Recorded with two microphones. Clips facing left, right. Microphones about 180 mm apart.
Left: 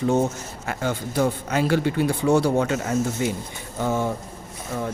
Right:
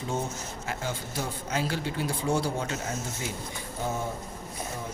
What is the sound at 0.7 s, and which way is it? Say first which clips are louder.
Speech: left 8 dB; 65° left (ahead or behind).